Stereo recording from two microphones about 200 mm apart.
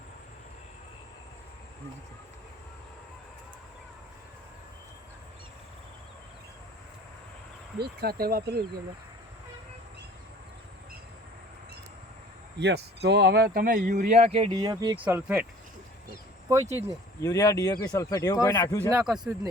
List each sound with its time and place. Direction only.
7.8 s speech: 50° right (ahead or behind)
12.5 s speech: 60° right (ahead or behind); by 14.5 s 30° right (ahead or behind)
14.5 s speech: 20° right (ahead or behind)
15.0 s speech: 10° right (ahead or behind)
16.7 s speech: 15° left (ahead or behind)
18.9 s speech: 5° right (ahead or behind)